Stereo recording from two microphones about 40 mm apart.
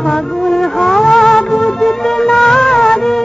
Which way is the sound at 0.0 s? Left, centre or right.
Centre.